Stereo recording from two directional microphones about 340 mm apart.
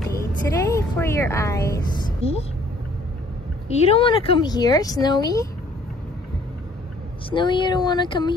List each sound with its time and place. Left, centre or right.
0.2 s a woman's voice: centre
3.6 s speech: centre
7.2 s speech: centre